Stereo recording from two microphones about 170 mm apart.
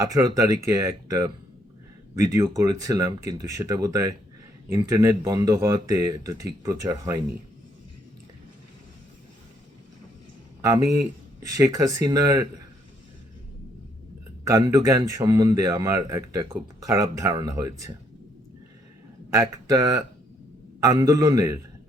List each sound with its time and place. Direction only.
0.0 s speech: 20° right (ahead or behind)
11.4 s speech: 20° right (ahead or behind)
14.4 s speech: 20° right (ahead or behind)
19.3 s speech: 20° right (ahead or behind)